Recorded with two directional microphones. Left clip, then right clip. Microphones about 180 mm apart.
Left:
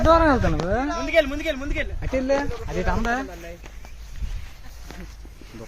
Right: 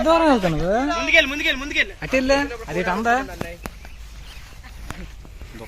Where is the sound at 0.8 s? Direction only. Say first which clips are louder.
Right 4 dB; 75° left (ahead or behind).